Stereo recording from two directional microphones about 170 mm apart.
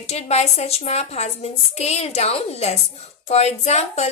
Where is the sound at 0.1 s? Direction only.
40° left (ahead or behind).